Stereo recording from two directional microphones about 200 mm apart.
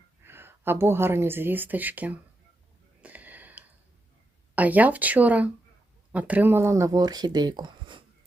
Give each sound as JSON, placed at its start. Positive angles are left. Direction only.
{"t": 0.3, "sound": "speech", "side_deg": -10}
{"t": 3.0, "sound": "a sound", "side_deg": -10}
{"t": 4.5, "sound": "speech", "side_deg": -10}